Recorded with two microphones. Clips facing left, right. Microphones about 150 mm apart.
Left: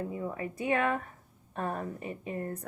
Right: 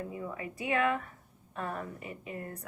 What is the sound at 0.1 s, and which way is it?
A woman's voice, 40° left (ahead or behind).